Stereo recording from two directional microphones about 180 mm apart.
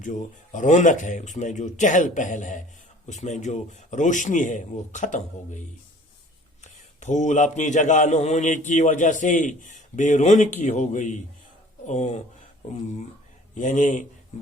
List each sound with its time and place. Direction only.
0.0 s speech: 45° left (ahead or behind)
7.0 s a man's voice: 40° left (ahead or behind)
13.5 s speech: 40° left (ahead or behind)